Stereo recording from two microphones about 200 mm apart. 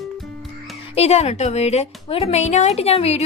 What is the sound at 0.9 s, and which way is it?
Speech, 30° left (ahead or behind).